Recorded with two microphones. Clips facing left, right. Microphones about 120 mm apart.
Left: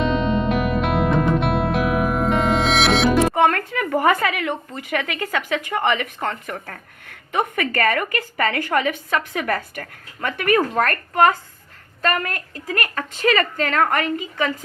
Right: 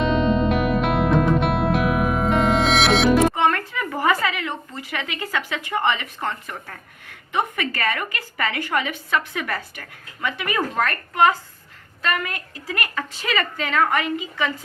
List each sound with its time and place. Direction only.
0.0 s music: centre (ahead or behind)
3.3 s a woman's voice: 50° left (ahead or behind)
6.5 s a woman's voice: 55° left (ahead or behind)